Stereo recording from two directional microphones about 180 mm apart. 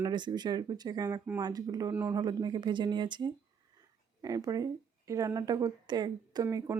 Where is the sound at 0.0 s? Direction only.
25° right (ahead or behind).